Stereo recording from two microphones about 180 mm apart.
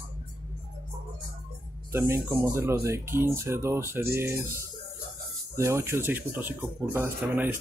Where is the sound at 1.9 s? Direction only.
15° right (ahead or behind).